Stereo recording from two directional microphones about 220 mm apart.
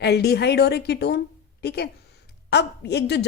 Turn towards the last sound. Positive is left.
turn(degrees=50)  # may be behind; listen again after turning